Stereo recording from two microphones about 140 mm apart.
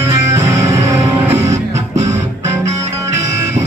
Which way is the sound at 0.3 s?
20° right (ahead or behind).